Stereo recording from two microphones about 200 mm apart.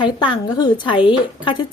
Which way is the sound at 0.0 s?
25° left (ahead or behind).